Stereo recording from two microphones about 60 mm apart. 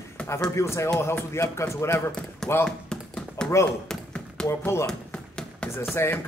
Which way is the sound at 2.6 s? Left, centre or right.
Centre.